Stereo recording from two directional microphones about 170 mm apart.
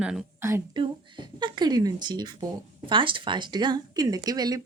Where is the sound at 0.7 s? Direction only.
25° right (ahead or behind).